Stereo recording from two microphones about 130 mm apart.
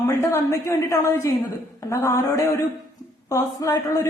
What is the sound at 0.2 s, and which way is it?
A woman's voice, 25° left (ahead or behind).